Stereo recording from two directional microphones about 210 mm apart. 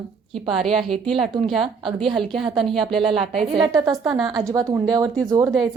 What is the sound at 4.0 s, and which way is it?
Speech, centre (ahead or behind).